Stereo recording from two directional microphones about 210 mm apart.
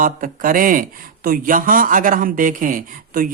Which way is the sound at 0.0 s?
40° right (ahead or behind).